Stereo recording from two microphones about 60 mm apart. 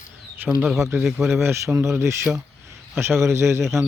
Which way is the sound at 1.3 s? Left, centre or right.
Right.